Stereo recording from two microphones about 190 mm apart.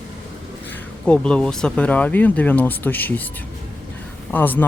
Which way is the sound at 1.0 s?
5° left (ahead or behind).